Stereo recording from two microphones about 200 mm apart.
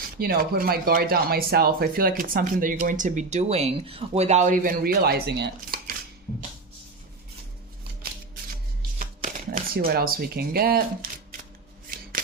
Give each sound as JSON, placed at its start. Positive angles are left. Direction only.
{"t": 0.2, "sound": "speech", "side_deg": -50}
{"t": 9.0, "sound": "shuffling cards", "side_deg": -40}